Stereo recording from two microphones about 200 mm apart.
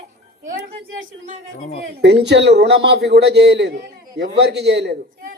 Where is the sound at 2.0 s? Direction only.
60° right (ahead or behind).